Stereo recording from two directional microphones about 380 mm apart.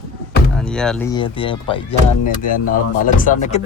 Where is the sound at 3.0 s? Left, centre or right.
Left.